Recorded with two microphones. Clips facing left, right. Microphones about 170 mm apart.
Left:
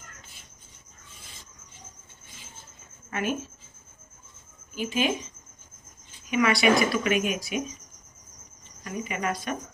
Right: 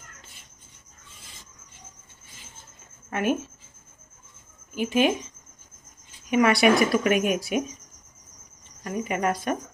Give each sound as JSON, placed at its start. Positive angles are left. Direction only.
{"t": 3.1, "sound": "speech", "side_deg": -55}
{"t": 4.7, "sound": "speech", "side_deg": -60}
{"t": 6.3, "sound": "speech", "side_deg": -55}
{"t": 8.8, "sound": "speech", "side_deg": -50}